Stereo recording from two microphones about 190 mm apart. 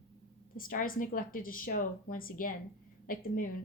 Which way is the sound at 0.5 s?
45° left (ahead or behind).